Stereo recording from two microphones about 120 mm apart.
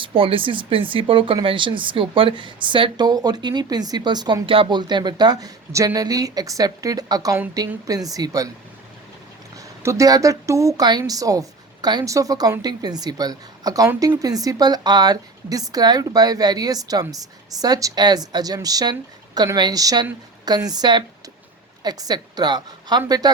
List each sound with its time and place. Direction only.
0.0 s speech: 50° right (ahead or behind); by 8.4 s 30° right (ahead or behind)
9.6 s speech: 25° right (ahead or behind)